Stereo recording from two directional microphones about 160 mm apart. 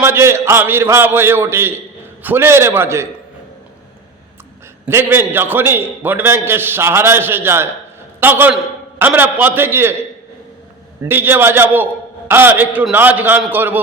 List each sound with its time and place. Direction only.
0.0 s a man's voice: 15° right (ahead or behind)
4.9 s a man's voice: 15° right (ahead or behind)
11.1 s a man's voice: 15° right (ahead or behind)